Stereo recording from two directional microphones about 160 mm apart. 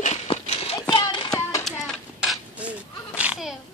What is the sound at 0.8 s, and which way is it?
Child singing, 30° left (ahead or behind).